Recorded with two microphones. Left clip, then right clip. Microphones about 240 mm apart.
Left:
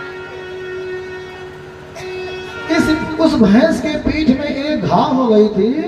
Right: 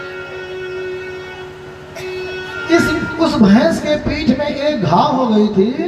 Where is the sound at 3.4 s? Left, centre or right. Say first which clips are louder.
Even; centre.